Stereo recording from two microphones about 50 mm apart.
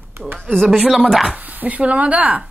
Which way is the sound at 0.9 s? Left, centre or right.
Centre.